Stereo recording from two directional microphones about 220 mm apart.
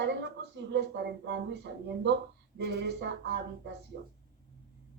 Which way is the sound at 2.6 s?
50° right (ahead or behind).